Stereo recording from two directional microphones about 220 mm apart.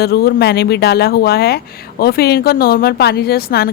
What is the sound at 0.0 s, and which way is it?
Speech, 45° left (ahead or behind).